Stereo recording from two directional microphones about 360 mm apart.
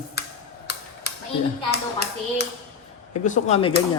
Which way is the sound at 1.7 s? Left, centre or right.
Left.